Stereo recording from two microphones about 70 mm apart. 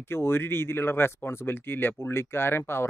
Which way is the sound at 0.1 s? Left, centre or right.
Left.